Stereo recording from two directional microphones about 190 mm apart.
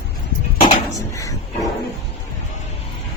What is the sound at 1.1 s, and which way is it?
Speech, 15° left (ahead or behind).